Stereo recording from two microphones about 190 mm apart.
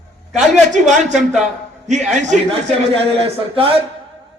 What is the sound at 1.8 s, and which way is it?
A man's voice, 40° right (ahead or behind).